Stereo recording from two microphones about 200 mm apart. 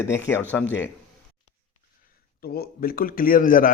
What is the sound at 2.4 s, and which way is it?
Speech, 50° left (ahead or behind).